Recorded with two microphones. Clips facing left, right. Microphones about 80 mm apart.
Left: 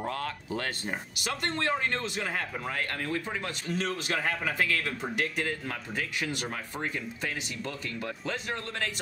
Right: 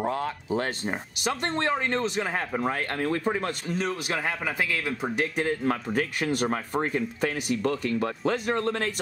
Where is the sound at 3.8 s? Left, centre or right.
Centre.